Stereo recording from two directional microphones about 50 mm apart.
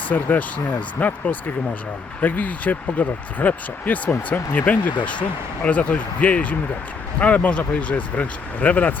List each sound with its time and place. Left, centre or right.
0.1 s speech: left